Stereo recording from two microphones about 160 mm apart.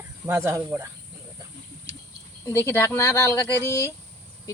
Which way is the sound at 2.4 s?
15° left (ahead or behind).